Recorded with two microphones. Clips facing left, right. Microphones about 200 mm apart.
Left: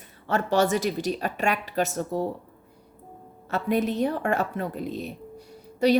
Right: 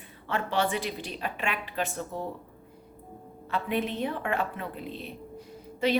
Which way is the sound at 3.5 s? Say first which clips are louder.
Left 5 dB; 40° left (ahead or behind).